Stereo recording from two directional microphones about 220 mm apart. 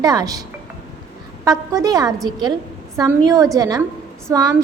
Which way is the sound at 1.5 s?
15° right (ahead or behind).